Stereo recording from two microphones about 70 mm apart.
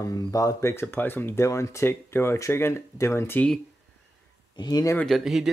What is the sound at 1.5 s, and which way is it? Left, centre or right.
Speech, left.